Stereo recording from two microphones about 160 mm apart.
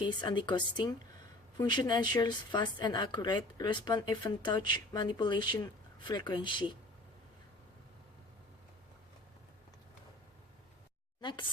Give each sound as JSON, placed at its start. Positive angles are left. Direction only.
{"t": 0.0, "sound": "a woman's voice", "side_deg": 30}
{"t": 11.2, "sound": "speech", "side_deg": 30}